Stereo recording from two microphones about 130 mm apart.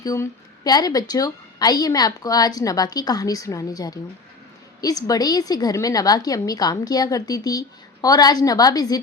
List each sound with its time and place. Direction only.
0.0 s a woman's voice: 30° left (ahead or behind)